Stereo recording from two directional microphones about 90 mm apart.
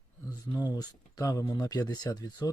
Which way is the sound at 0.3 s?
45° left (ahead or behind).